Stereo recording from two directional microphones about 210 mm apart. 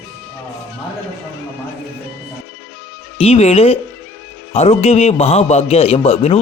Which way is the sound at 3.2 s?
30° left (ahead or behind).